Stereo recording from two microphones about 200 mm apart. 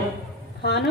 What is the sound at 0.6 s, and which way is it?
Speech, 55° left (ahead or behind).